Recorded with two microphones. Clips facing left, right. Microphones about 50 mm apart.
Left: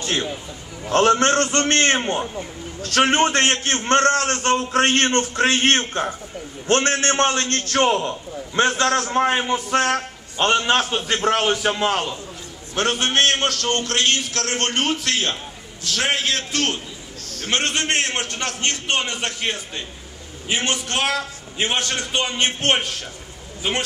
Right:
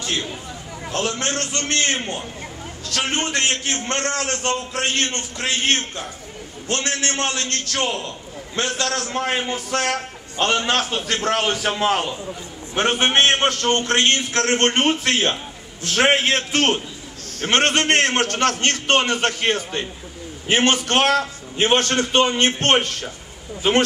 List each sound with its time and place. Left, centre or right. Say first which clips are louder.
0.0 s a man's voice: left 2 dB; left; by 11.0 s centre
11.2 s a man's voice: left 2 dB; centre
11.7 s a man's voice: right 1 dB; centre; by 16.8 s right
17.6 s a man's voice: right 5 dB; right